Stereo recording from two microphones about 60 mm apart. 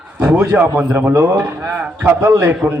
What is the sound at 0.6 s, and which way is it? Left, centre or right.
Speech, right.